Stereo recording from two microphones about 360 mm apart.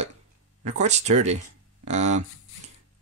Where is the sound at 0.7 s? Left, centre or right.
Centre.